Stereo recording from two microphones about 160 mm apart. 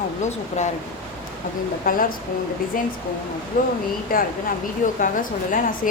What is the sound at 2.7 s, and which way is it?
Speech, 60° left (ahead or behind).